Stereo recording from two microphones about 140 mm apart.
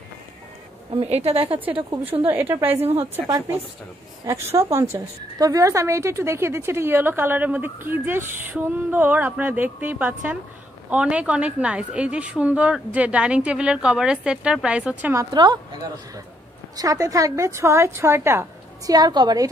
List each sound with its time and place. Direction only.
0.9 s a woman's voice: 45° right (ahead or behind)
2.3 s a woman's voice: 15° right (ahead or behind)
2.8 s a woman's voice: 45° right (ahead or behind)
4.3 s a woman's voice: 20° right (ahead or behind)
15.3 s a woman's voice: 30° right (ahead or behind)